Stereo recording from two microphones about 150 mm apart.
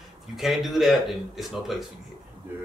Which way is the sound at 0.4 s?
Centre (ahead or behind).